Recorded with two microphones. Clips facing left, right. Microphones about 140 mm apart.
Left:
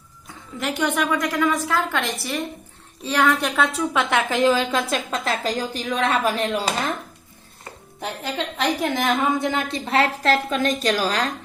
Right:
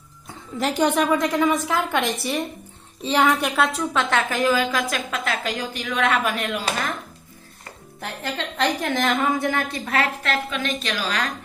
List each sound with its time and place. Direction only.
0.6 s a woman's voice: 35° right (ahead or behind); by 3.4 s 15° right (ahead or behind)
3.4 s a woman's voice: 5° right (ahead or behind)
4.1 s a woman's voice: 20° left (ahead or behind)
8.0 s a woman's voice: 15° left (ahead or behind); by 11.3 s 35° left (ahead or behind)